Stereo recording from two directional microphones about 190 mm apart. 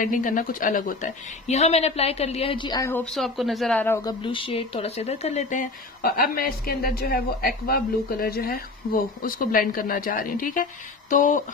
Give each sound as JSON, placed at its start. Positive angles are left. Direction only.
{"t": 0.0, "sound": "a woman's voice", "side_deg": 45}
{"t": 3.1, "sound": "a woman's voice", "side_deg": 0}